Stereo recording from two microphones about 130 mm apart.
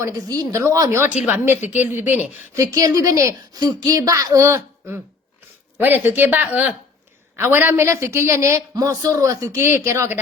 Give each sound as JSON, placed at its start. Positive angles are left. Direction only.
{"t": 0.0, "sound": "a woman's voice", "side_deg": -25}
{"t": 2.6, "sound": "a woman's voice", "side_deg": -25}